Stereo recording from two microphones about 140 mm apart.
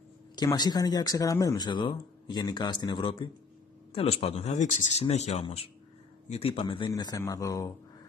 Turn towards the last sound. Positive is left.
turn(degrees=25)  # may be behind; listen again after turning